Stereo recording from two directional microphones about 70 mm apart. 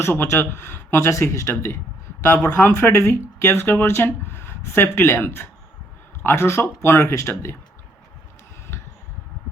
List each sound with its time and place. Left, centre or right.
0.0 s speech: left